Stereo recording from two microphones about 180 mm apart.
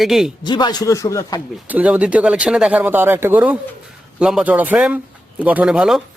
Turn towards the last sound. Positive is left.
turn(degrees=-5)  # may be behind; listen again after turning